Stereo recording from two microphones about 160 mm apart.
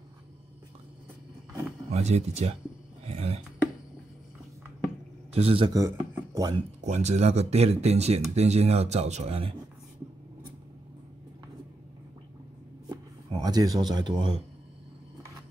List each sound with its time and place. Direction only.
1.9 s speech: 40° right (ahead or behind)
3.1 s a sound: 40° right (ahead or behind)
5.3 s a man's voice: 35° right (ahead or behind)
5.7 s speech: 20° right (ahead or behind)
6.8 s speech: 45° right (ahead or behind)
13.4 s speech: 25° right (ahead or behind)